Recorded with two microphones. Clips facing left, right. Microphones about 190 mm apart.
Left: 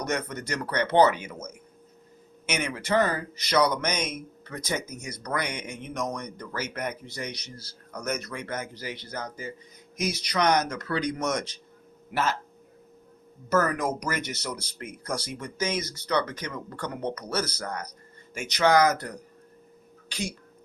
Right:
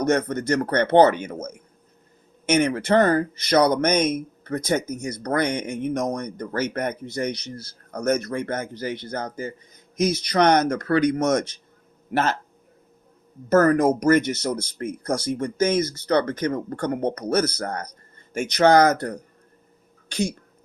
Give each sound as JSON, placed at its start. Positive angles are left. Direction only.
{"t": 0.0, "sound": "speech", "side_deg": -45}
{"t": 13.5, "sound": "speech", "side_deg": -50}